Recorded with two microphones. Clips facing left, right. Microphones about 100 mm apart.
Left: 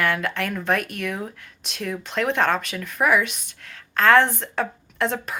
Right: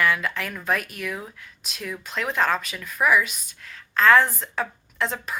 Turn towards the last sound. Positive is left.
turn(degrees=55)  # may be behind; listen again after turning